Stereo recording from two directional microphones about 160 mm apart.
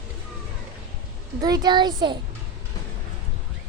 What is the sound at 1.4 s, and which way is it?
Speech, 25° right (ahead or behind).